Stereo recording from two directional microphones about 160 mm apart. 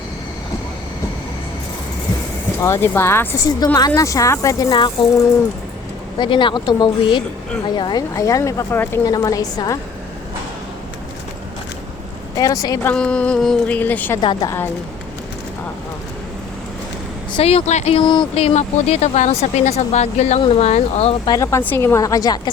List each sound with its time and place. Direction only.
2.6 s a woman's voice: 15° left (ahead or behind)
6.1 s a woman's voice: 30° left (ahead or behind)
12.4 s a woman's voice: 20° left (ahead or behind)
12.9 s speech: 5° left (ahead or behind)
14.2 s a woman's voice: 30° left (ahead or behind)
17.3 s speech: 40° left (ahead or behind)
18.0 s speech: 30° left (ahead or behind)
21.2 s a woman's voice: 20° left (ahead or behind)